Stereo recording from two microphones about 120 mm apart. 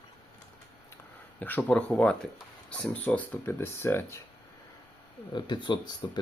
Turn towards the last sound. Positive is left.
turn(degrees=40)  # may be behind; listen again after turning